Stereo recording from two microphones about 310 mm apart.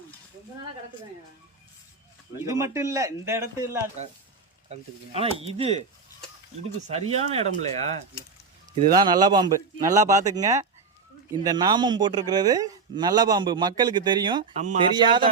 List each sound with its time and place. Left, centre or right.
2.4 s a man's voice: centre
6.8 s speech: right
8.7 s a man's voice: centre